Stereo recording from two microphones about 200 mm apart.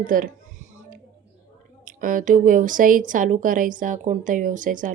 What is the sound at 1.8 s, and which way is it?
A woman's voice, 45° right (ahead or behind).